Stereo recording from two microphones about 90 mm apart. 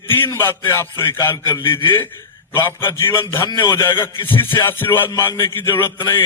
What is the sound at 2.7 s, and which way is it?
Speech, 25° left (ahead or behind).